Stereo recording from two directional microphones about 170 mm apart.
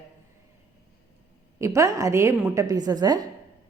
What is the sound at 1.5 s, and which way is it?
A woman's voice, 20° right (ahead or behind).